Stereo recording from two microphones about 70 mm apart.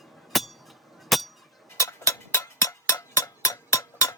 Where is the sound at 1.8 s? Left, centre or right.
Left.